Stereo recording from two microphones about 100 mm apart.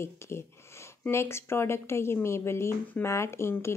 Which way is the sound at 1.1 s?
25° left (ahead or behind).